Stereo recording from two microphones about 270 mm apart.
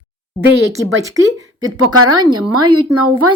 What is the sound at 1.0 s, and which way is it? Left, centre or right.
Speech, centre.